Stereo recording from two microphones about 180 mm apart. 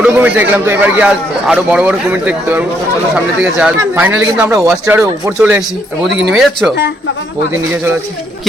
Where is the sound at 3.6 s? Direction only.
10° right (ahead or behind).